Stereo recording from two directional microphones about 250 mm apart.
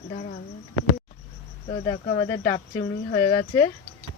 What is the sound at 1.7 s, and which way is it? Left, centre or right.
Speech, centre.